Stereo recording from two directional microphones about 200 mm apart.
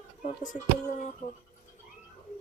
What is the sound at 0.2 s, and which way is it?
Speech, 40° left (ahead or behind).